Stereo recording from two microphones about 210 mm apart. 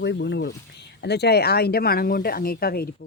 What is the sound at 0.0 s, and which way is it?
Speech, 55° left (ahead or behind).